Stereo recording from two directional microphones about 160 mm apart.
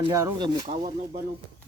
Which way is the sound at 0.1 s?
20° right (ahead or behind).